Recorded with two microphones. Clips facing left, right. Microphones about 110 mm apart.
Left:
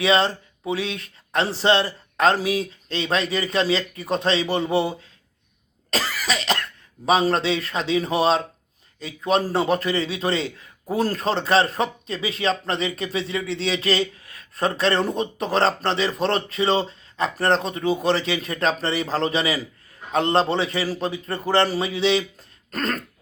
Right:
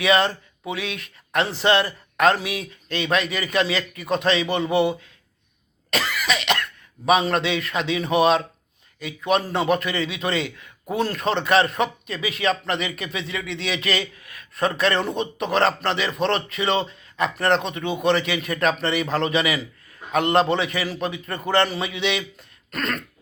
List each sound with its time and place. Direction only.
0.0 s speech: 30° left (ahead or behind)